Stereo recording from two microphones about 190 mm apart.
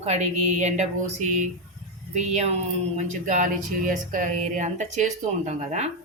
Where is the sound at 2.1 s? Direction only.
35° right (ahead or behind).